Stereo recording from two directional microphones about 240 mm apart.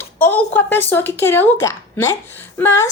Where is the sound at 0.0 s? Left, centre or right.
Centre.